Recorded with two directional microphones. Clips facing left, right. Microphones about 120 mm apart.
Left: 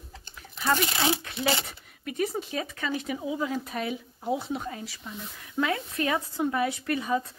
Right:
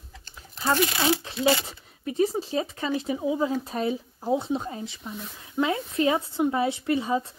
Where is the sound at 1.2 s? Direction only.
25° right (ahead or behind).